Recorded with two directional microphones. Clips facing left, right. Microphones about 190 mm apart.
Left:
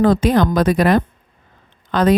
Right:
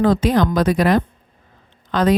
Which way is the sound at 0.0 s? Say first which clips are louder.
Left 2 dB; 50° left (ahead or behind).